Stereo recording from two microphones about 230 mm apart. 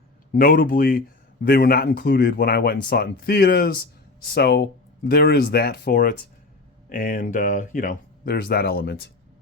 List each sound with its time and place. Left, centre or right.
0.3 s speech: left